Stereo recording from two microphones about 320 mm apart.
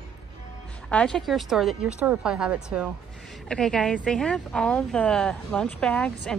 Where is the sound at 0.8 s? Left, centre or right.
Centre.